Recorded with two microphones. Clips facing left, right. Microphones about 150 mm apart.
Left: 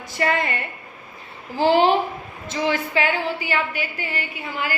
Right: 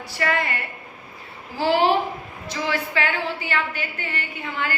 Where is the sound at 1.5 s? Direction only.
20° left (ahead or behind).